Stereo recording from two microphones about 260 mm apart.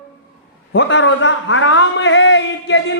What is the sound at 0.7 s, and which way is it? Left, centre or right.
A man's voice, left.